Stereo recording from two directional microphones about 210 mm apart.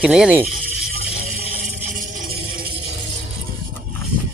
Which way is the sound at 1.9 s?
45° right (ahead or behind).